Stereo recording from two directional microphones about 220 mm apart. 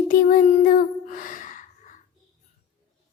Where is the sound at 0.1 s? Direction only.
35° left (ahead or behind).